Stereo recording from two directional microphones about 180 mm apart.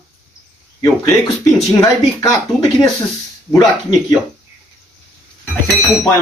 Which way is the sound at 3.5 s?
20° left (ahead or behind).